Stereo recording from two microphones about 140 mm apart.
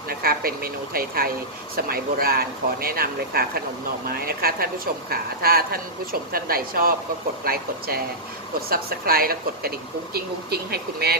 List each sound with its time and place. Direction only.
0.1 s a woman's voice: 90° right